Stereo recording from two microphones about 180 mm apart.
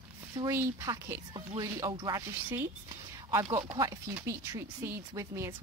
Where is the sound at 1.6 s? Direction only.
25° right (ahead or behind).